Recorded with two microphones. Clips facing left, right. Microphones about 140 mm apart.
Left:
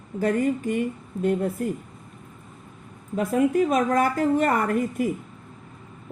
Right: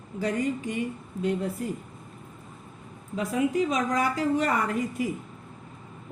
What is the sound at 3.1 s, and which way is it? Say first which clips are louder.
A woman's voice: left 5 dB; 50° left (ahead or behind).